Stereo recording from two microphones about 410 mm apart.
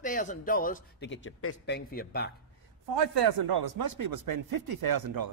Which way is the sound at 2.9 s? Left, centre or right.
Right.